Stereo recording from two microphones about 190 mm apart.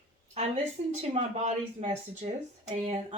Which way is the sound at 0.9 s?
35° right (ahead or behind).